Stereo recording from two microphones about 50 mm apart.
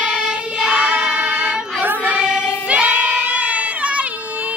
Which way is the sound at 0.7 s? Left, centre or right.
Right.